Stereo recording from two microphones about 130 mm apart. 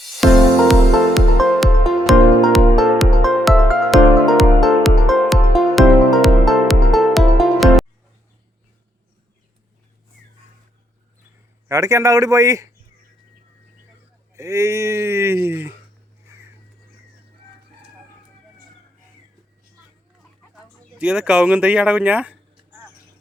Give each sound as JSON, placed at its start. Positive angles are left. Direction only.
{"t": 0.2, "sound": "music", "side_deg": 0}
{"t": 11.7, "sound": "speech", "side_deg": -25}
{"t": 14.3, "sound": "speech", "side_deg": -20}
{"t": 21.0, "sound": "speech", "side_deg": -5}